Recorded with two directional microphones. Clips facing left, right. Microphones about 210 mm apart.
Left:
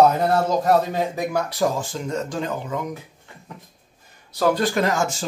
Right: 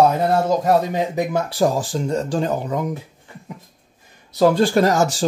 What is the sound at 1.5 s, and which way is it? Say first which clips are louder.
Speech: right 4 dB; 35° right (ahead or behind).